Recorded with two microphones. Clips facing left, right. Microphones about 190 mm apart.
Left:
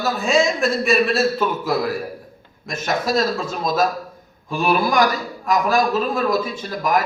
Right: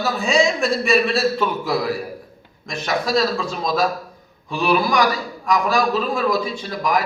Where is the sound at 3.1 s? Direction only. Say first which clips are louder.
Right 1 dB; 45° left (ahead or behind).